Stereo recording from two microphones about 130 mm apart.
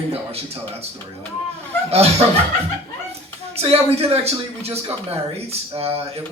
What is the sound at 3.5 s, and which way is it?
A man's voice, 50° right (ahead or behind).